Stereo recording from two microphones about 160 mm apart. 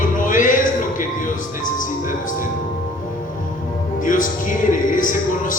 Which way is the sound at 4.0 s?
55° left (ahead or behind).